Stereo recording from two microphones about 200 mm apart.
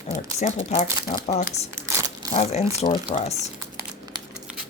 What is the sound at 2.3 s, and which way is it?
Speech, 35° left (ahead or behind).